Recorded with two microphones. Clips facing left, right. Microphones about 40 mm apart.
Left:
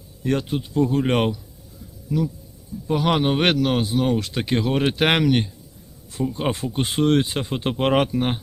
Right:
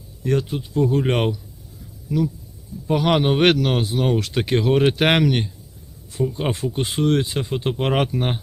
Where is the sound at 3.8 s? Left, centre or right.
Right.